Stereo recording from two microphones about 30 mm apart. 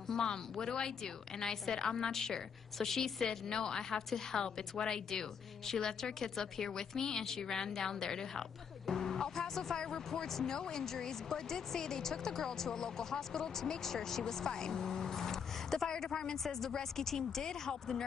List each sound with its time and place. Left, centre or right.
0.1 s a woman's voice: left